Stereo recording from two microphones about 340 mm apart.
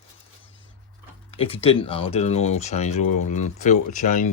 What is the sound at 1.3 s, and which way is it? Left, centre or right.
Speech, centre.